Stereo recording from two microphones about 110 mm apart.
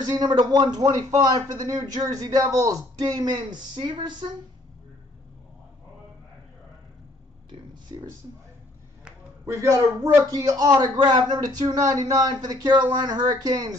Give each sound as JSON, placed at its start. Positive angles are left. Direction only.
{"t": 0.0, "sound": "a man's voice", "side_deg": -40}
{"t": 7.4, "sound": "a sound", "side_deg": -40}
{"t": 9.5, "sound": "a man's voice", "side_deg": -25}